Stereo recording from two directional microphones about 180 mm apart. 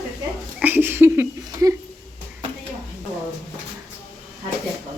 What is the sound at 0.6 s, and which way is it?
A woman's voice, 10° right (ahead or behind).